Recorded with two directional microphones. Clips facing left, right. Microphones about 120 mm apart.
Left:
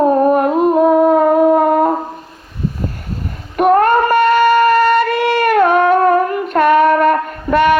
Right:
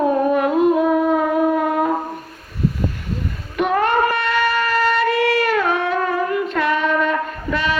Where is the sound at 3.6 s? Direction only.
45° left (ahead or behind).